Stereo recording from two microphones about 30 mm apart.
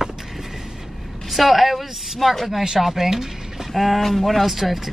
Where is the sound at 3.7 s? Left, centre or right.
Centre.